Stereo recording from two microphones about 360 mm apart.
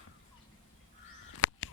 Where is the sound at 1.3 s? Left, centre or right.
Left.